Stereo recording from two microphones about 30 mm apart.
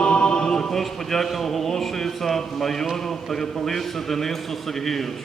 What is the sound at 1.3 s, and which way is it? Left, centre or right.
A man's voice, centre.